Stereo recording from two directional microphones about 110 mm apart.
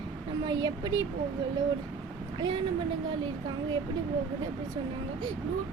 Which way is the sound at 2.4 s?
45° right (ahead or behind).